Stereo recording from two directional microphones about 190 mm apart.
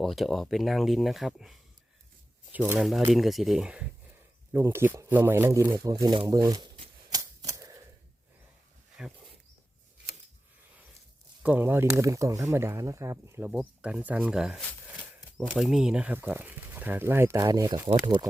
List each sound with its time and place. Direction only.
0.0 s speech: centre (ahead or behind); by 7.8 s 20° right (ahead or behind)
9.0 s speech: 5° right (ahead or behind)
11.4 s speech: 10° right (ahead or behind)